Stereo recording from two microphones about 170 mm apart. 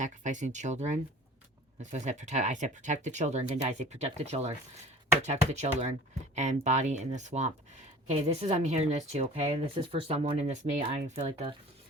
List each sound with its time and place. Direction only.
0.0 s speech: 45° right (ahead or behind)